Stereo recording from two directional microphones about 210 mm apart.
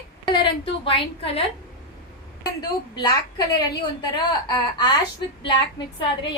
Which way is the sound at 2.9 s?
20° left (ahead or behind).